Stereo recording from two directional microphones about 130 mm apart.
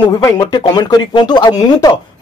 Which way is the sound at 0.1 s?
30° left (ahead or behind).